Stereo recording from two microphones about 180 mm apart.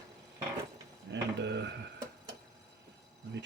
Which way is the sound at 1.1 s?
70° right (ahead or behind).